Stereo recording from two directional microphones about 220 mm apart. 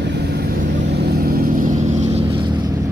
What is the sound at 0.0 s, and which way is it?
Vehicle, 50° right (ahead or behind).